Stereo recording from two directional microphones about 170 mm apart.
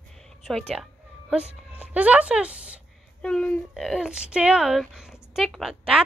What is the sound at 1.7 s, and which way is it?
A woman's voice, 10° right (ahead or behind).